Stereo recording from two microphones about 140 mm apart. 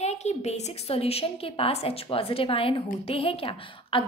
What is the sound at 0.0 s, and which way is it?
A woman's voice, 50° left (ahead or behind).